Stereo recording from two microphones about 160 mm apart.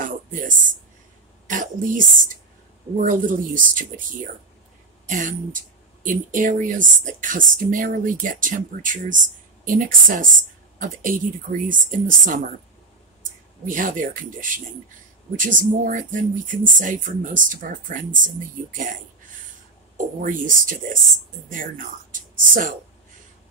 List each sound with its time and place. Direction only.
0.0 s speech: 55° right (ahead or behind)
5.0 s speech: 55° right (ahead or behind)
13.7 s speech: 55° right (ahead or behind)
20.0 s speech: 55° right (ahead or behind)